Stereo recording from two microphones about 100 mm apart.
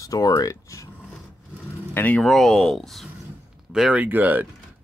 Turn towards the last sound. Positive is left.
turn(degrees=-20)  # may be behind; listen again after turning